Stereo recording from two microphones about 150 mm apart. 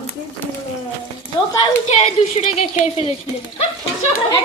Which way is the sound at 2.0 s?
45° left (ahead or behind).